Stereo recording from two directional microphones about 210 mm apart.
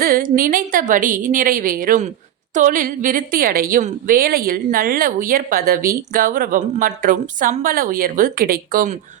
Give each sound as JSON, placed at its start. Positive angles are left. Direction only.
{"t": 0.0, "sound": "a woman's voice", "side_deg": -40}